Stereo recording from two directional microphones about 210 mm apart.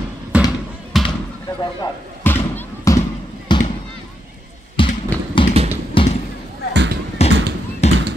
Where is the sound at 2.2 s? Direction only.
10° left (ahead or behind).